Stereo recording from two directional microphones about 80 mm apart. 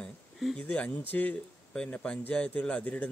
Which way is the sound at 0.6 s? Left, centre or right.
Centre.